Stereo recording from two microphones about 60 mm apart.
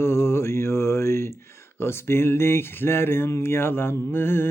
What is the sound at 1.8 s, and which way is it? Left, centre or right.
Speech, left.